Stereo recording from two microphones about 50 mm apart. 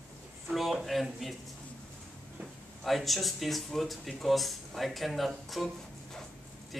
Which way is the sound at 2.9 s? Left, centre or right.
Centre.